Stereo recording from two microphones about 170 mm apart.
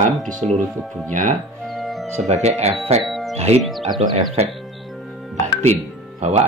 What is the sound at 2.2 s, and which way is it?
Speech, 40° right (ahead or behind).